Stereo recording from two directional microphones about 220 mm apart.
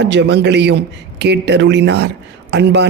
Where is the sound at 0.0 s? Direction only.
50° right (ahead or behind).